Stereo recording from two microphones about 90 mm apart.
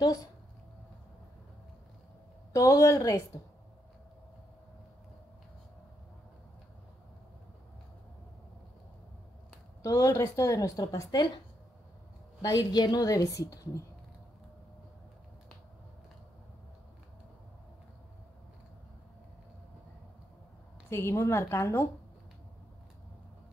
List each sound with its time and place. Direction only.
2.5 s a woman's voice: 40° left (ahead or behind)
9.8 s a woman's voice: 35° left (ahead or behind)
12.4 s a woman's voice: 50° left (ahead or behind)
20.9 s a woman's voice: 30° left (ahead or behind)